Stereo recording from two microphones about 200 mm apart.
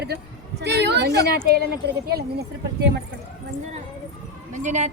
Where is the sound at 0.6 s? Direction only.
55° right (ahead or behind).